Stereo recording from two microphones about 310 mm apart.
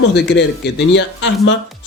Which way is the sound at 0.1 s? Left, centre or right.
Left.